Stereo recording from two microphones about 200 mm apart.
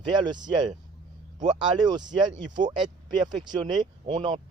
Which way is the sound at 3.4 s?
20° right (ahead or behind).